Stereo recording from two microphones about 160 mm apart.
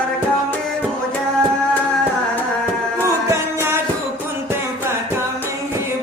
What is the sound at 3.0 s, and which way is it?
Music, 15° right (ahead or behind).